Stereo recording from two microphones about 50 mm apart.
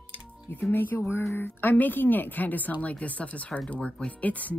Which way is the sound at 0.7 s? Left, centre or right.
Left.